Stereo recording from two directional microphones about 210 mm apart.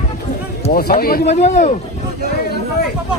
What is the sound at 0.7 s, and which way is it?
Speech, 45° left (ahead or behind).